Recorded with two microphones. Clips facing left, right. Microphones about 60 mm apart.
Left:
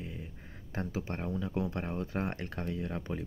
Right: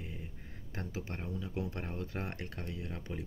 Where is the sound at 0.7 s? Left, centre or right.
Left.